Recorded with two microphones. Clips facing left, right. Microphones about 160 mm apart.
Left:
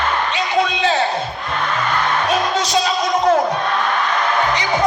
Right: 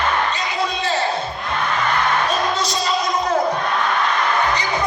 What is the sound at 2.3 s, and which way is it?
Music, 90° left.